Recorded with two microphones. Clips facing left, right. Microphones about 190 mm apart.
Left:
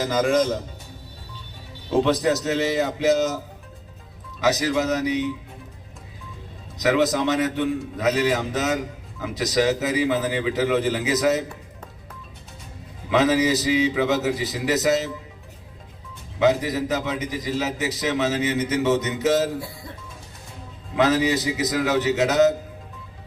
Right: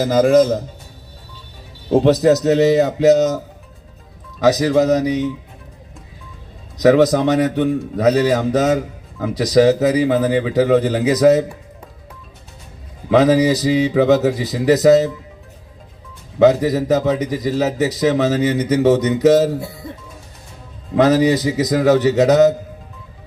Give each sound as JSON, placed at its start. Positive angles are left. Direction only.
{"t": 0.0, "sound": "a man's voice", "side_deg": -40}
{"t": 1.9, "sound": "a man's voice", "side_deg": -40}
{"t": 4.4, "sound": "a man's voice", "side_deg": -40}
{"t": 6.8, "sound": "a man's voice", "side_deg": -40}
{"t": 13.1, "sound": "a man's voice", "side_deg": -40}
{"t": 16.4, "sound": "a man's voice", "side_deg": -40}
{"t": 19.5, "sound": "speech", "side_deg": -25}
{"t": 20.9, "sound": "a man's voice", "side_deg": -40}